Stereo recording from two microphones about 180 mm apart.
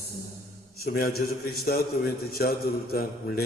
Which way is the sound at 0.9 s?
55° left (ahead or behind).